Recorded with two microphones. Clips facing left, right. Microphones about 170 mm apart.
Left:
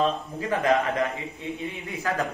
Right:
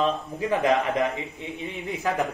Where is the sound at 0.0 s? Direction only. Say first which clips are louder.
Right 1 dB; 20° right (ahead or behind).